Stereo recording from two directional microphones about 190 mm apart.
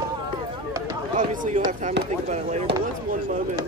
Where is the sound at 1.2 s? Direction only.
45° right (ahead or behind).